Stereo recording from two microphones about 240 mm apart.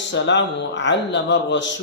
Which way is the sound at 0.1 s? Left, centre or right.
Left.